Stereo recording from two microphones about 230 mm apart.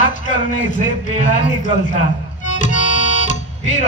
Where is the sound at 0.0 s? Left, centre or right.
Left.